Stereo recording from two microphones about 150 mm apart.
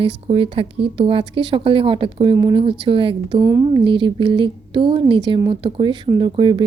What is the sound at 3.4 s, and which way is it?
A woman's voice, 25° right (ahead or behind).